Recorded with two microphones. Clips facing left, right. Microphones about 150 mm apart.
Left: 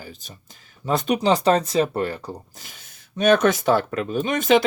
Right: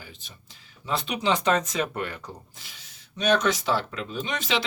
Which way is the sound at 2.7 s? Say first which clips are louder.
Left 3 dB; 50° left (ahead or behind).